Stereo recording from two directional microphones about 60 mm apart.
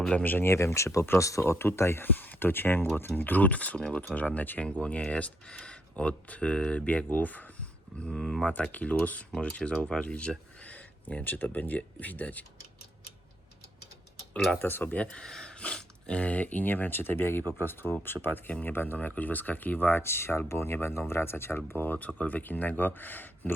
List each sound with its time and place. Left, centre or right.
0.1 s speech: left
0.4 s speech: left
2.1 s speech: left; by 4.0 s centre
4.0 s speech: left
8.1 s speech: centre
8.7 s speech: left
11.1 s speech: left
14.3 s speech: centre
14.6 s speech: left
14.9 s speech: centre; by 23.6 s left